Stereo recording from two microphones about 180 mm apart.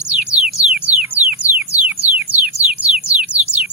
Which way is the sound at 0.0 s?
5° right (ahead or behind).